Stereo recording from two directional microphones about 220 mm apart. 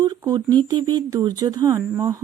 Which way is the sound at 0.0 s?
20° right (ahead or behind).